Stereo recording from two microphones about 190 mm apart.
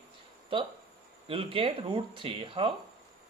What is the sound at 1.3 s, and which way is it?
Speech, 30° right (ahead or behind).